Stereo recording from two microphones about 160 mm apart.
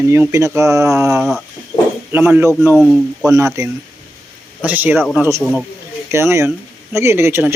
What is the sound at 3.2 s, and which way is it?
Speech, 20° right (ahead or behind).